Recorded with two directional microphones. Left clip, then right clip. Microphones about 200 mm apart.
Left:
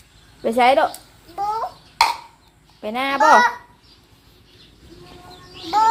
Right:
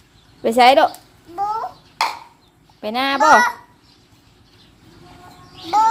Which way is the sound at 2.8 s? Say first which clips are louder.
Right 1 dB; 15° right (ahead or behind).